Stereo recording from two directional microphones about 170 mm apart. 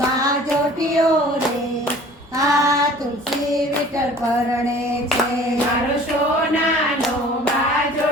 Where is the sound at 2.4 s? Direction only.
20° right (ahead or behind).